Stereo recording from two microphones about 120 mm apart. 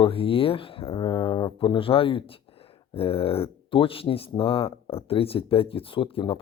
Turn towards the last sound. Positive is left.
turn(degrees=45)  # may be behind; listen again after turning